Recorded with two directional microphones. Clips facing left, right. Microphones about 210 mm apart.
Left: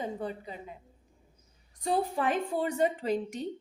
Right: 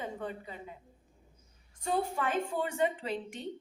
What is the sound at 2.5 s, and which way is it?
A woman's voice, 35° left (ahead or behind).